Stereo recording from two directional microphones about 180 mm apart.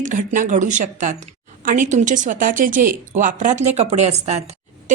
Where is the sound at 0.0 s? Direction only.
45° right (ahead or behind).